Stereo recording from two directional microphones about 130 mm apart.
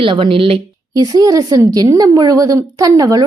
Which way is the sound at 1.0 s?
30° right (ahead or behind).